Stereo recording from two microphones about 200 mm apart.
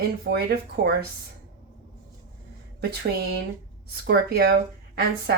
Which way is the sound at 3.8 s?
55° right (ahead or behind).